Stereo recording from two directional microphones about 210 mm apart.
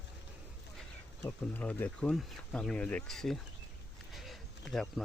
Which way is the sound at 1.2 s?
10° left (ahead or behind).